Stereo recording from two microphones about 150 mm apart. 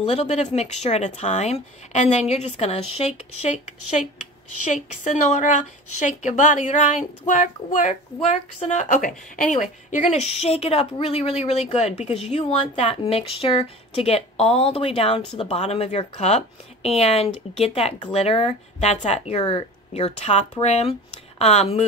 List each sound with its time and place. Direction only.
0.0 s a woman's voice: 45° left (ahead or behind)
4.6 s a woman's voice: 55° left (ahead or behind)